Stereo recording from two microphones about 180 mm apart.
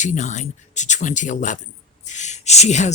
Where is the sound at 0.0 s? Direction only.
40° left (ahead or behind).